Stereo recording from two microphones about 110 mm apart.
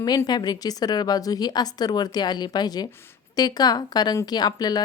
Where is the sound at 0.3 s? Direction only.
40° left (ahead or behind).